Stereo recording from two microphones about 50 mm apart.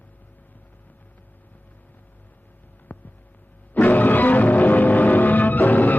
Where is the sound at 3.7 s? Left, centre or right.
Left.